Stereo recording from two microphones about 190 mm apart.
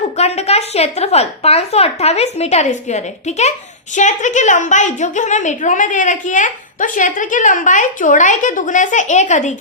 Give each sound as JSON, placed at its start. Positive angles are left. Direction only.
{"t": 0.2, "sound": "a woman's voice", "side_deg": 35}